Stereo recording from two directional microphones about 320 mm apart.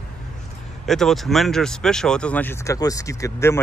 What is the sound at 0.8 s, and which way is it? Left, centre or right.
Speech, centre.